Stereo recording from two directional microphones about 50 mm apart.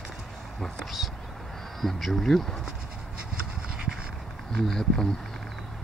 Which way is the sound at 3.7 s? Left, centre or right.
Centre.